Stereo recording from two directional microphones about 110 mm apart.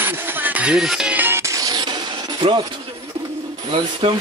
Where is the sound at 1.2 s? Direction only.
20° right (ahead or behind).